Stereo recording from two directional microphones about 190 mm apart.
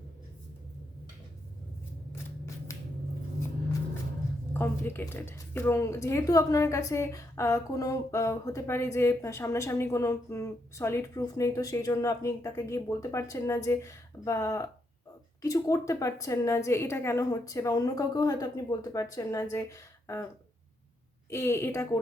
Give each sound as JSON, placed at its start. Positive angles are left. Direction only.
{"t": 2.7, "sound": "a sound", "side_deg": 15}
{"t": 4.5, "sound": "a woman's voice", "side_deg": 10}
{"t": 21.2, "sound": "a woman's voice", "side_deg": 15}